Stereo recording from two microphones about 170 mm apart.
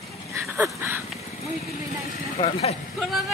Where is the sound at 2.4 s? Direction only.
35° left (ahead or behind).